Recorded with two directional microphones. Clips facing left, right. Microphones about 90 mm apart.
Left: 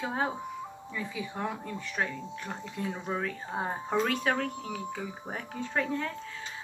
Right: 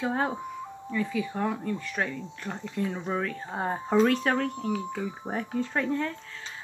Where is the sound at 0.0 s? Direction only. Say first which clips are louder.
Right 3 dB; centre (ahead or behind).